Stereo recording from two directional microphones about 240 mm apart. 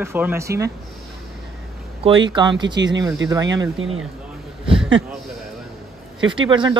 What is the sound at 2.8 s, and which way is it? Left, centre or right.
Speech, right.